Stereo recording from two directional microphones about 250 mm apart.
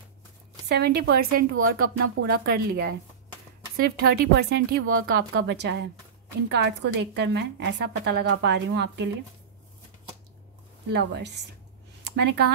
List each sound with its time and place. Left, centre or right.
0.7 s a woman's voice: right
1.6 s speech: right
2.4 s a woman's voice: right
10.9 s a woman's voice: right
12.0 s a sound: right